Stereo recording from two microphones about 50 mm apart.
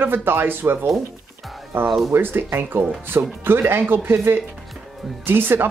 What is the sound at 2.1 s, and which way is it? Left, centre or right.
Speech, right.